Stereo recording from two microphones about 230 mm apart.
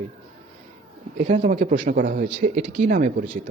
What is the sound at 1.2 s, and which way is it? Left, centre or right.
Speech, right.